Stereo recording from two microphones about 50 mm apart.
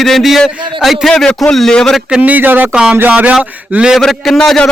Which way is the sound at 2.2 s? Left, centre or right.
Right.